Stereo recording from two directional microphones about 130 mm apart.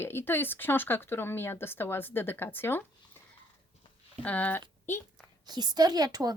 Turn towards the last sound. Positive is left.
turn(degrees=-30)  # may be behind; listen again after turning